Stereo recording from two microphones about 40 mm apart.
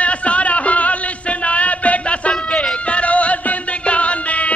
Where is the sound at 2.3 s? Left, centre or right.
Centre.